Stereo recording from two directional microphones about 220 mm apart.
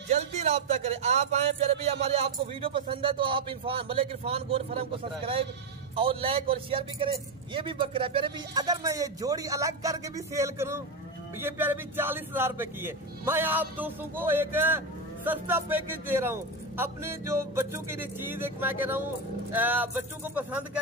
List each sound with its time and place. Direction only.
0.1 s speech: 30° right (ahead or behind); by 20.8 s 10° right (ahead or behind)